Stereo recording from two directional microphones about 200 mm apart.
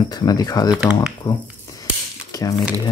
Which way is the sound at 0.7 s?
5° right (ahead or behind).